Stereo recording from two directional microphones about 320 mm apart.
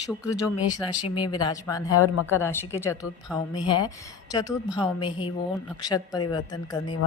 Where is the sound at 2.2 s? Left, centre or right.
Centre.